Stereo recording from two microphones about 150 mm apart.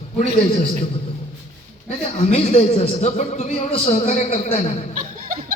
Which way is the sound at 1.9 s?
45° left (ahead or behind).